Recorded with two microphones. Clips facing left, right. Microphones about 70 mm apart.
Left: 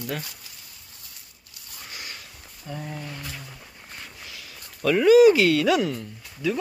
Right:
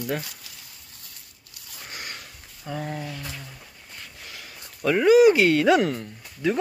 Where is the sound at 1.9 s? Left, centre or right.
Right.